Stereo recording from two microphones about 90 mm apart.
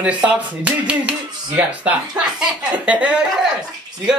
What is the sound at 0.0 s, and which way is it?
Speech, 10° right (ahead or behind).